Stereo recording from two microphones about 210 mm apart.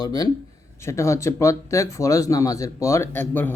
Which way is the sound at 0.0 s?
20° left (ahead or behind).